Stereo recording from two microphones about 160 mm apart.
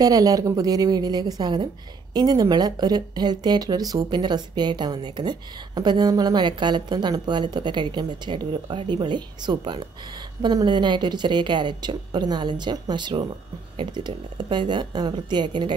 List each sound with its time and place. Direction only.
0.0 s speech: 20° right (ahead or behind)